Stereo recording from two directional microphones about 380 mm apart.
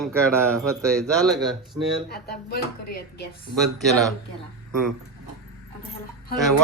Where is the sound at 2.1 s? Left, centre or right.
Left.